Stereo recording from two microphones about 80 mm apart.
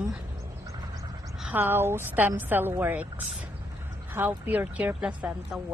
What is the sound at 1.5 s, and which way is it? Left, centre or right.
Speech, right.